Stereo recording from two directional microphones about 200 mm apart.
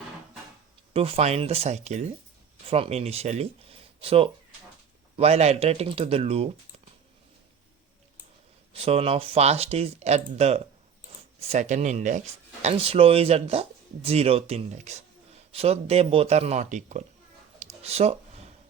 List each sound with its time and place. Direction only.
0.9 s speech: 30° right (ahead or behind)
8.7 s speech: 30° right (ahead or behind)
17.8 s a sound: 30° right (ahead or behind)